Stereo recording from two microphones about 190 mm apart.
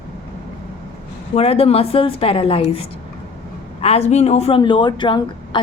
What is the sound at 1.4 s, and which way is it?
Speech, 30° left (ahead or behind).